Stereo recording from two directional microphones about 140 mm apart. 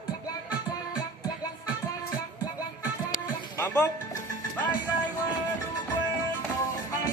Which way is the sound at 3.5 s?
20° left (ahead or behind).